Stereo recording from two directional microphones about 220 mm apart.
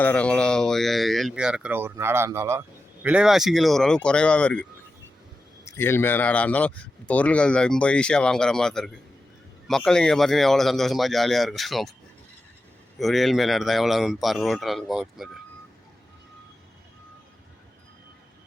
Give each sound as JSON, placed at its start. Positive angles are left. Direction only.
{"t": 0.0, "sound": "speech", "side_deg": 5}
{"t": 5.6, "sound": "speech", "side_deg": 10}
{"t": 13.0, "sound": "speech", "side_deg": 0}